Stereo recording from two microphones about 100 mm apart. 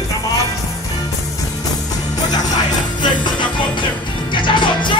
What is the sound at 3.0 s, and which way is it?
Music, 50° left (ahead or behind).